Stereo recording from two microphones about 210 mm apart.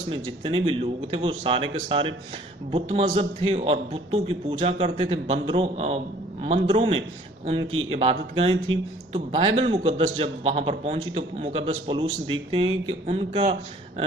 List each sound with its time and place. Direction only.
0.1 s a man's voice: 25° right (ahead or behind)